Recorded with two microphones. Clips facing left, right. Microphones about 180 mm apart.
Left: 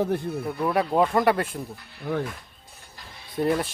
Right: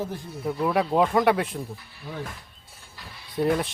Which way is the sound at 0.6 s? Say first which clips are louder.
Even; centre (ahead or behind).